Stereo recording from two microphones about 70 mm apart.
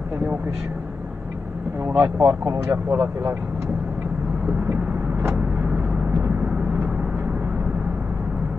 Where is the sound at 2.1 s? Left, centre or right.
Right.